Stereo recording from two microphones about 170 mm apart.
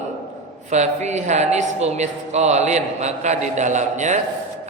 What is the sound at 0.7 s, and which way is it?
A woman's voice, 45° right (ahead or behind).